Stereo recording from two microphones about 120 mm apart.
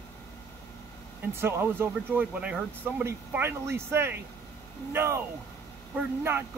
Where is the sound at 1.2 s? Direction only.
20° right (ahead or behind).